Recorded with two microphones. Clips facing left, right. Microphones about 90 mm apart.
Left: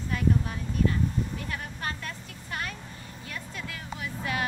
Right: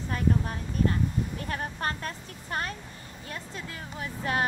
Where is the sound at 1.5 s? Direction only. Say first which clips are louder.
Right 3 dB; 40° right (ahead or behind).